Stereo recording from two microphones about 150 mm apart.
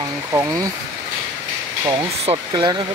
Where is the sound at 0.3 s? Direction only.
20° right (ahead or behind).